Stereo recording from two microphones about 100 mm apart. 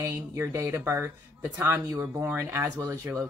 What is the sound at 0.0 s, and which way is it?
Speech, 30° right (ahead or behind).